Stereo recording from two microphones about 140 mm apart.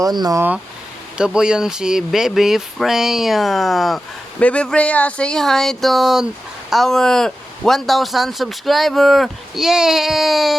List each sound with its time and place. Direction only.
0.0 s speech: 30° right (ahead or behind)
1.2 s speech: 5° right (ahead or behind)